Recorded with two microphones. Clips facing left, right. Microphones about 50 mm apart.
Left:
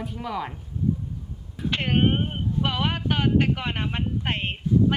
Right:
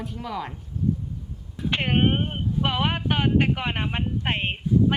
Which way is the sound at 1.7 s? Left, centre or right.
Right.